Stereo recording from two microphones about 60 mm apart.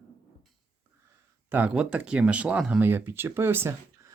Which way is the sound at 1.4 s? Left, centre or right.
Right.